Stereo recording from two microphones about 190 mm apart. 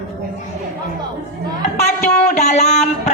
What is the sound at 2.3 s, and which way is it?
Speech, 35° left (ahead or behind).